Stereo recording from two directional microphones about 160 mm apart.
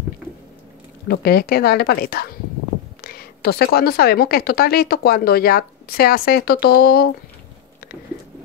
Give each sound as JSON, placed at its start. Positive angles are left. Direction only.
{"t": 1.0, "sound": "a woman's voice", "side_deg": 75}